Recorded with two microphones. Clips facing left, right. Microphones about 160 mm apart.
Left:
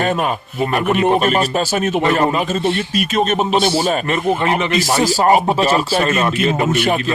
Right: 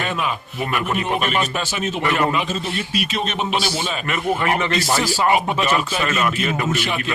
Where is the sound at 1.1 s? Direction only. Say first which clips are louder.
Left 6 dB; 40° left (ahead or behind).